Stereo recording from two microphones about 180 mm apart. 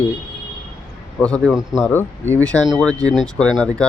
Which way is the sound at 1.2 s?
5° left (ahead or behind).